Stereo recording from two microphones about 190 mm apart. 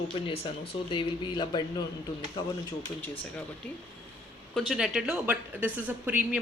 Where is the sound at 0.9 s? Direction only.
25° left (ahead or behind).